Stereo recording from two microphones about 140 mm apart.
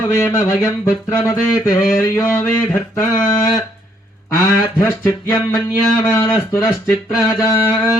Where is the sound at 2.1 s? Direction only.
15° left (ahead or behind).